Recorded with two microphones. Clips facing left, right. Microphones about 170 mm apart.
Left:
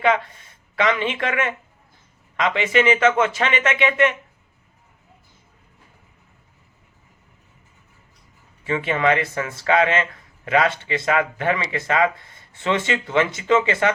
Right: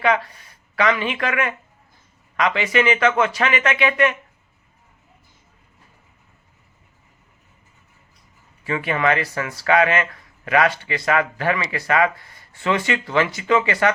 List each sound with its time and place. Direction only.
0.0 s speech: 25° left (ahead or behind)
8.6 s speech: 25° left (ahead or behind)